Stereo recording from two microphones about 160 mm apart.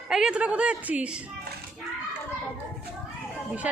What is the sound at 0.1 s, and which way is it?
A woman's voice, 5° right (ahead or behind).